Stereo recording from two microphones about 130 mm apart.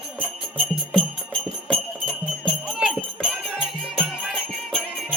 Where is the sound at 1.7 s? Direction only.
5° left (ahead or behind).